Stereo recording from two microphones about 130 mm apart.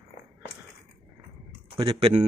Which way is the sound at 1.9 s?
45° right (ahead or behind).